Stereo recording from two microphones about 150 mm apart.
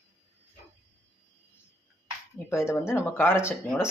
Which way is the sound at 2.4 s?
15° left (ahead or behind).